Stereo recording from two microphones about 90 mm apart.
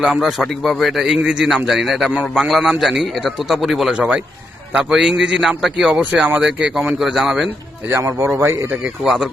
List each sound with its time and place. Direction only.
0.0 s a man's voice: 5° right (ahead or behind)
5.9 s a man's voice: 15° right (ahead or behind)
7.9 s speech: 30° right (ahead or behind)
9.0 s a man's voice: 5° right (ahead or behind)